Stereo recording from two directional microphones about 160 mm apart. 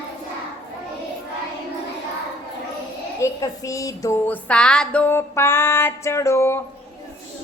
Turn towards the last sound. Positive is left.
turn(degrees=15)  # may be behind; listen again after turning